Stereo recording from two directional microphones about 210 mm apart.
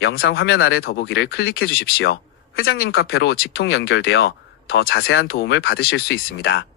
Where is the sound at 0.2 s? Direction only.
65° left (ahead or behind).